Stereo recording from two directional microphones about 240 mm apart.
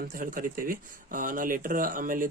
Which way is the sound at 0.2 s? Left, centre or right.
Right.